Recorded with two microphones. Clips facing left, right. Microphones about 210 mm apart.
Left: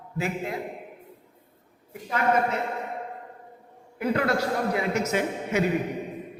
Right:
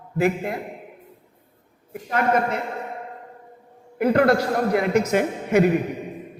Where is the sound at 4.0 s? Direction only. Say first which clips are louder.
Right 7 dB; 55° right (ahead or behind).